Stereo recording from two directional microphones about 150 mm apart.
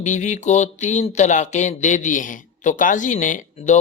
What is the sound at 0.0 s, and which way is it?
Speech, 55° left (ahead or behind).